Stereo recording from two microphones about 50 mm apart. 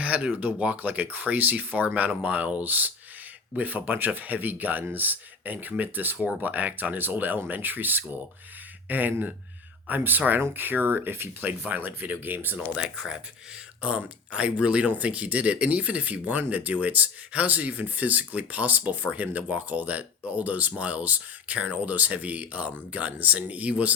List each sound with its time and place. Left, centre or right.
0.0 s speech: right
12.5 s speech: centre